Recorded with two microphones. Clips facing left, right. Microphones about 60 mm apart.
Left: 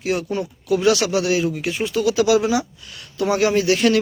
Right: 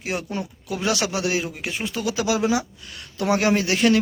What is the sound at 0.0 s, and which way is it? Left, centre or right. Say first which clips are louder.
Speech: left 5 dB; right.